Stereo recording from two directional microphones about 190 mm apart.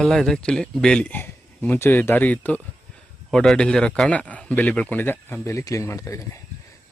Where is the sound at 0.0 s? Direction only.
Centre (ahead or behind).